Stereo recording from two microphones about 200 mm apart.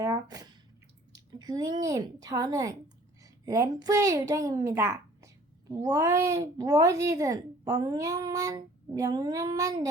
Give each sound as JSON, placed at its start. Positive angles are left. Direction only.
{"t": 0.0, "sound": "squish", "side_deg": -20}
{"t": 1.1, "sound": "a woman's voice", "side_deg": -20}